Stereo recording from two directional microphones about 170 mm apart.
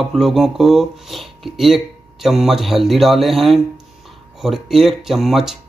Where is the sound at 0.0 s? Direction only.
Centre (ahead or behind).